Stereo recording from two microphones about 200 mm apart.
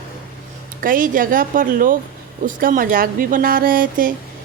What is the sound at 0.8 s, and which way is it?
Speech, 45° right (ahead or behind).